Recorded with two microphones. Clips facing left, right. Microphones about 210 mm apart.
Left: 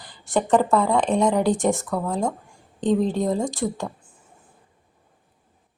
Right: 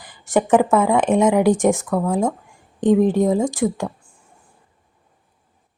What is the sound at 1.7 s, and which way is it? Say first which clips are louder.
Speech: right 4 dB; centre (ahead or behind).